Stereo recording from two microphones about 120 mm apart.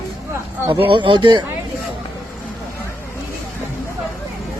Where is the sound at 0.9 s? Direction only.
45° right (ahead or behind).